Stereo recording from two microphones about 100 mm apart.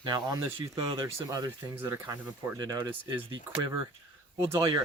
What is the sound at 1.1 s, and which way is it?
Speech, 35° right (ahead or behind).